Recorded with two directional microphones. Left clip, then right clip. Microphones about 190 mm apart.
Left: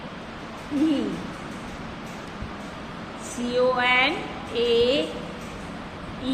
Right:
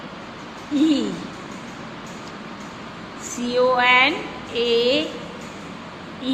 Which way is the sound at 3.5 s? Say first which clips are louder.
Right 5 dB; 15° right (ahead or behind).